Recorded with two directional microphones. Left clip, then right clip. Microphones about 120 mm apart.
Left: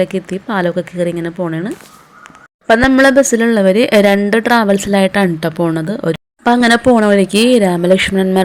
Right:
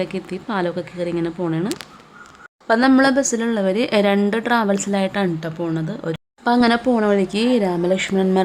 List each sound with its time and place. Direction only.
0.0 s speech: 25° left (ahead or behind)
2.6 s a woman's voice: 35° left (ahead or behind)
5.4 s a woman's voice: 45° left (ahead or behind); by 8.4 s 25° left (ahead or behind)